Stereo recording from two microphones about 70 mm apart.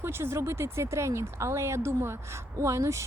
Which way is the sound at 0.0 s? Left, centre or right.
Right.